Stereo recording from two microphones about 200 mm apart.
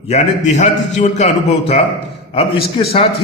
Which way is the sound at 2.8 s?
25° left (ahead or behind).